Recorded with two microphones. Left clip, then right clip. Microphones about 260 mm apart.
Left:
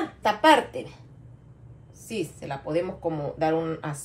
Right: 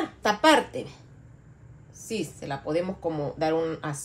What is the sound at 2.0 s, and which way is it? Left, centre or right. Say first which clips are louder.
A woman's voice: even; right.